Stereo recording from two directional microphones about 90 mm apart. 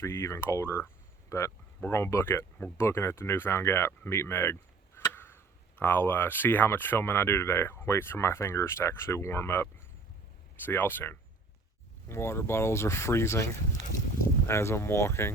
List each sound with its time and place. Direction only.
0.0 s speech: 30° left (ahead or behind)